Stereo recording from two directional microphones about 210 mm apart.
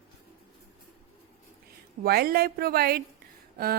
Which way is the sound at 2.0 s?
45° right (ahead or behind).